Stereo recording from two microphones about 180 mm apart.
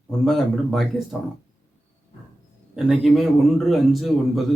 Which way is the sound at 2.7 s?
Centre (ahead or behind).